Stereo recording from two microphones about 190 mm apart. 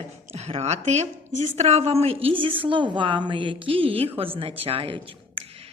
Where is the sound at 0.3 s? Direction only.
35° right (ahead or behind).